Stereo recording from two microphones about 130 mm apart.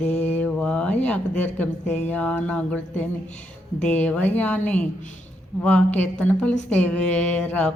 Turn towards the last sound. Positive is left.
turn(degrees=10)  # may be behind; listen again after turning